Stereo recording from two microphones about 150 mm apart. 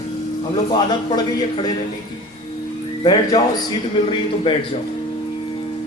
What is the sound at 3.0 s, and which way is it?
Speech, 30° left (ahead or behind).